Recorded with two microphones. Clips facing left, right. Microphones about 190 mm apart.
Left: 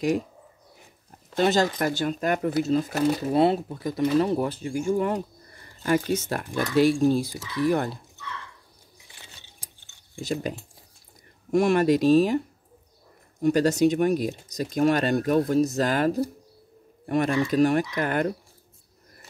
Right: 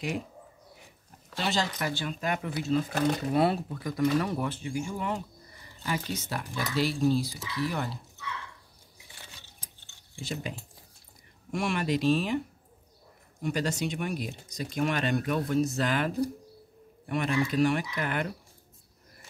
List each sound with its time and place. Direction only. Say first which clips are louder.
1.3 s speech: left 9 dB; 45° left (ahead or behind)
3.3 s speech: left 5 dB; 25° left (ahead or behind); by 7.9 s 50° left (ahead or behind)
10.1 s speech: left 7 dB; 40° left (ahead or behind)
11.5 s speech: left 9 dB; 40° left (ahead or behind)
13.4 s speech: left 10 dB; 45° left (ahead or behind)